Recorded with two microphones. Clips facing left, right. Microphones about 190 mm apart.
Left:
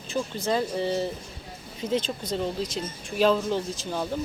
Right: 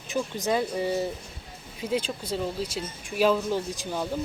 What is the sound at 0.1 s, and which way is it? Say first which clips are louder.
Speech: even; 15° right (ahead or behind).